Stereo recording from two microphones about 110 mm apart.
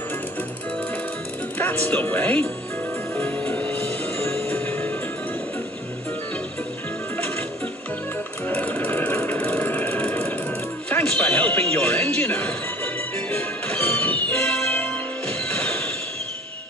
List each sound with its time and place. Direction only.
1.6 s speech: 15° left (ahead or behind)
3.2 s music: 15° left (ahead or behind)
8.5 s a sound: 15° left (ahead or behind)
10.9 s music: 15° left (ahead or behind)